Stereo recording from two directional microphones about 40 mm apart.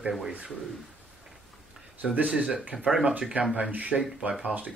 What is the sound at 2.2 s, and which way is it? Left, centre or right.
Speech, right.